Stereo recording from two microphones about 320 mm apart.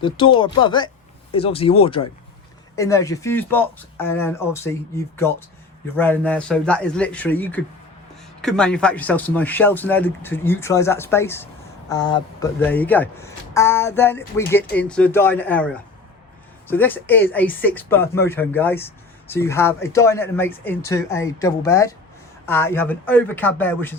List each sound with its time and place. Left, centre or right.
0.0 s a man's voice: centre